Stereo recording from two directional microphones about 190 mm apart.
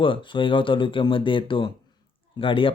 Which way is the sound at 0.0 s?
25° left (ahead or behind).